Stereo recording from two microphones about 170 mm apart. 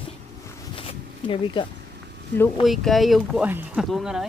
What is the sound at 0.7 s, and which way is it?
Zipper, 35° left (ahead or behind).